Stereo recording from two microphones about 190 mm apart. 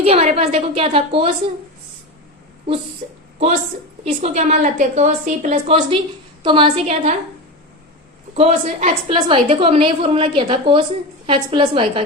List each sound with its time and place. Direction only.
0.0 s a woman's voice: 30° right (ahead or behind)
4.0 s a woman's voice: 35° right (ahead or behind)
8.4 s a woman's voice: 35° right (ahead or behind)